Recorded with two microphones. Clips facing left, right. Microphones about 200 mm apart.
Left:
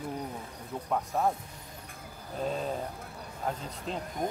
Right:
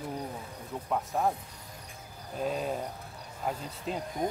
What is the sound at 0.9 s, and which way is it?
Speech, centre (ahead or behind).